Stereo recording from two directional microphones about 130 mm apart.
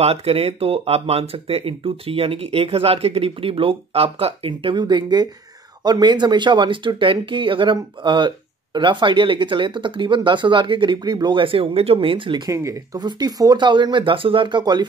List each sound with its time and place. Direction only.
0.0 s speech: 50° right (ahead or behind)
12.4 s speech: 25° right (ahead or behind)